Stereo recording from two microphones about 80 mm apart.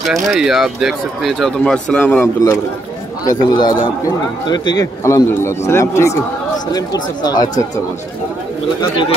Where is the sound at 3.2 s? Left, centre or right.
Left.